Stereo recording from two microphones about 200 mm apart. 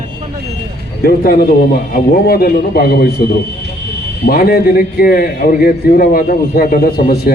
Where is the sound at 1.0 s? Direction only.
50° left (ahead or behind).